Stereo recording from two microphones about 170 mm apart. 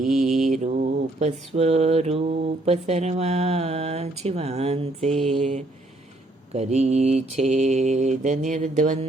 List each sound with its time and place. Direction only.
0.1 s mantra: centre (ahead or behind)
0.5 s mantra: 45° right (ahead or behind)